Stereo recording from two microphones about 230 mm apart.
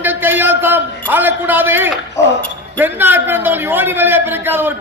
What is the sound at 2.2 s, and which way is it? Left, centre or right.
Speech, centre.